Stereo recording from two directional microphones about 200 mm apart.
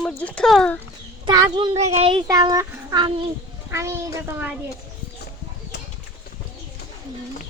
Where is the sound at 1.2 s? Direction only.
20° right (ahead or behind).